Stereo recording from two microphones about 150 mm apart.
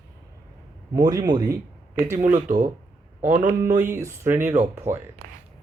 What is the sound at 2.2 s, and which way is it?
Speech, 55° right (ahead or behind).